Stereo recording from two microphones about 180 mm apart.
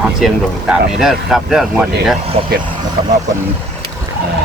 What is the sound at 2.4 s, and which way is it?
Speech, 30° right (ahead or behind).